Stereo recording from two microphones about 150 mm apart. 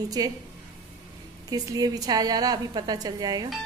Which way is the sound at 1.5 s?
25° right (ahead or behind).